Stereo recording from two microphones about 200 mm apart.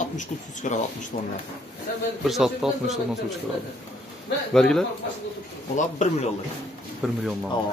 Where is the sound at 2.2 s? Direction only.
Centre (ahead or behind).